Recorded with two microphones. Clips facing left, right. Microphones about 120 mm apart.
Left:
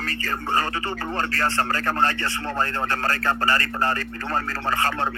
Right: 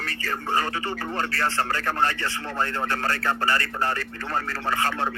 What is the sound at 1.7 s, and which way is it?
A man's voice, 40° left (ahead or behind).